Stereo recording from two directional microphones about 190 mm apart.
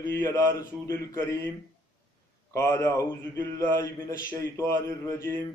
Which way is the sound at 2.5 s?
15° left (ahead or behind).